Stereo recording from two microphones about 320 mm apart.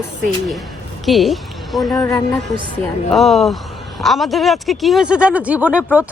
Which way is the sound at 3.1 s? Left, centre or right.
Centre.